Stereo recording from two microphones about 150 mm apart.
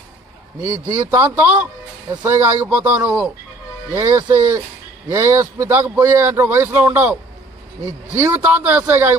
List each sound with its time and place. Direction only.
0.6 s a man's voice: 25° right (ahead or behind)